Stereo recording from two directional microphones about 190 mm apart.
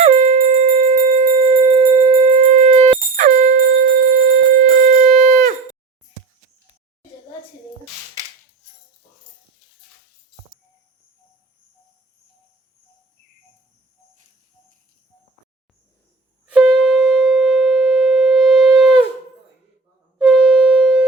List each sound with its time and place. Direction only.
0.0 s jingle bell: 35° right (ahead or behind)
16.5 s shofar: 5° right (ahead or behind)
20.1 s a sound: 5° right (ahead or behind)